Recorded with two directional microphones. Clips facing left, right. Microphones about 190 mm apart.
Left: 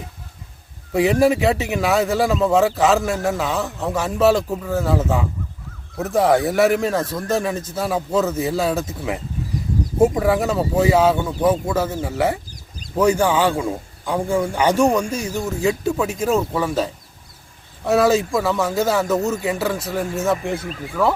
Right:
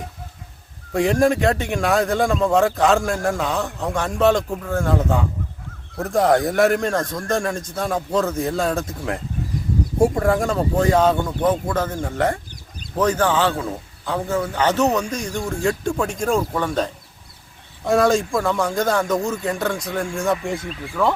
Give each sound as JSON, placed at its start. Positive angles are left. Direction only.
{"t": 0.9, "sound": "a man's voice", "side_deg": 5}
{"t": 20.6, "sound": "speech", "side_deg": 40}